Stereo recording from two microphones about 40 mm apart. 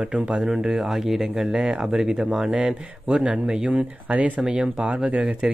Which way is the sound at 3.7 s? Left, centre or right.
Right.